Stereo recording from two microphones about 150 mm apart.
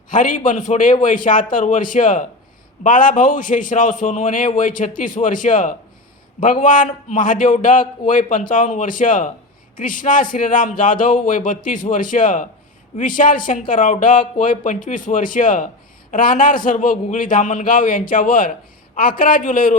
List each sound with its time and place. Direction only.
0.1 s a man's voice: 60° left (ahead or behind)